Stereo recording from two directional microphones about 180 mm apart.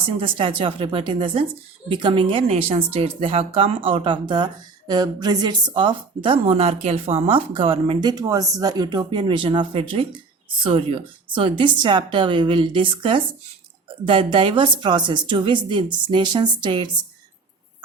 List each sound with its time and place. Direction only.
0.2 s a woman's voice: 30° right (ahead or behind)